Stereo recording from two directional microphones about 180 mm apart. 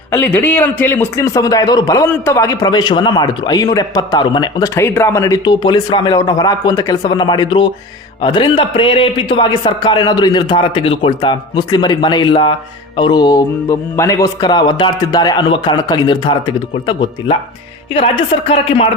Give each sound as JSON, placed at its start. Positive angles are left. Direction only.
{"t": 0.1, "sound": "speech", "side_deg": 10}